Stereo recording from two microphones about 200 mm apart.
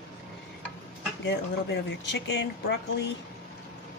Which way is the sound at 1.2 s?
60° left (ahead or behind).